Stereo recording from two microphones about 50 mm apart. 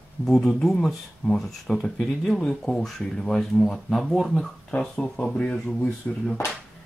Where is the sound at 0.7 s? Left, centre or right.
Centre.